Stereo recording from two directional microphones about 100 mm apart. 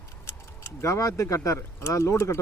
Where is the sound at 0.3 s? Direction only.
25° left (ahead or behind).